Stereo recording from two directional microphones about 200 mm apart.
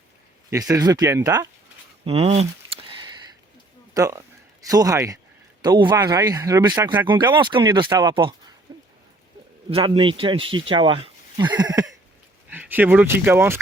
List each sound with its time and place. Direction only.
0.5 s speech: 20° right (ahead or behind)
2.0 s speech: 30° right (ahead or behind)
3.9 s speech: 15° right (ahead or behind)
8.7 s a sound: 20° right (ahead or behind)
9.6 s speech: 30° right (ahead or behind)
12.5 s a sound: 10° right (ahead or behind)
13.2 s speech: 10° right (ahead or behind)